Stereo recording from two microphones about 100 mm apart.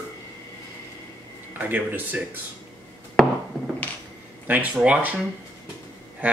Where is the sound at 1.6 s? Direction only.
20° right (ahead or behind).